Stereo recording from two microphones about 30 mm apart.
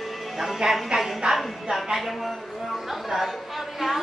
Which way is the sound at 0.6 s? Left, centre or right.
Right.